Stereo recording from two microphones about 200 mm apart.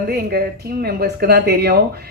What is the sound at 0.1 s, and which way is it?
Speech, 50° right (ahead or behind).